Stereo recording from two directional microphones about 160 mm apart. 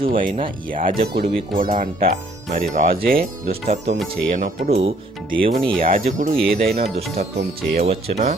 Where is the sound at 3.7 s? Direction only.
40° right (ahead or behind).